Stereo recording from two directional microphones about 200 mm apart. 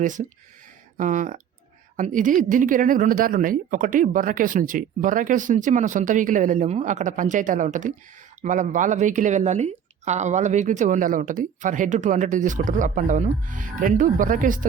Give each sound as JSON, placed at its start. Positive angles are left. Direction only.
{"t": 0.0, "sound": "speech", "side_deg": -40}